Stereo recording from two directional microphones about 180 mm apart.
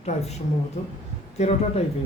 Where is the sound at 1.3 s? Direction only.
35° left (ahead or behind).